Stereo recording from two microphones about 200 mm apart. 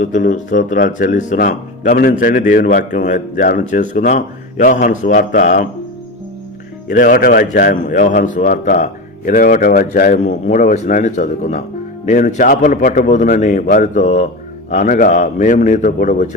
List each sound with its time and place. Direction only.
0.0 s a man's voice: 40° left (ahead or behind)
6.9 s a man's voice: 45° left (ahead or behind)